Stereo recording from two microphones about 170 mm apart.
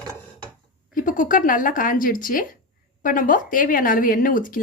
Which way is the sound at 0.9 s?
50° left (ahead or behind).